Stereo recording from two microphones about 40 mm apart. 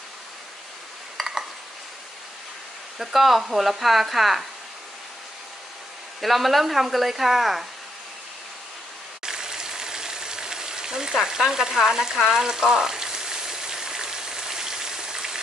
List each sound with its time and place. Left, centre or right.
3.0 s speech: centre
6.2 s speech: centre
9.2 s a sound: centre